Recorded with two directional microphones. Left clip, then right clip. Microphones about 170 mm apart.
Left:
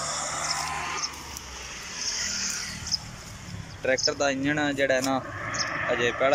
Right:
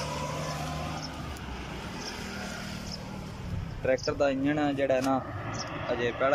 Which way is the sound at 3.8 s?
5° right (ahead or behind).